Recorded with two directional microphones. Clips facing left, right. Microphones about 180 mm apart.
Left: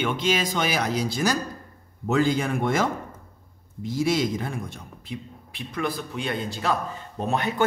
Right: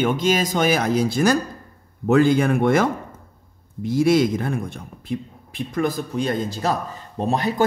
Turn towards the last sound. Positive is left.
turn(degrees=-35)  # may be behind; listen again after turning